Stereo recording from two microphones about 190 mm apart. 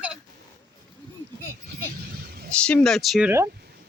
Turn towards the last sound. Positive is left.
turn(degrees=0)  # may be behind; listen again after turning